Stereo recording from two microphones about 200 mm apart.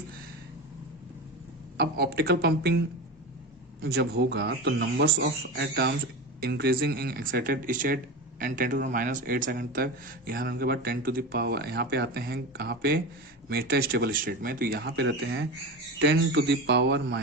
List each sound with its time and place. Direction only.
1.8 s a man's voice: 55° right (ahead or behind)
3.8 s a man's voice: 50° right (ahead or behind)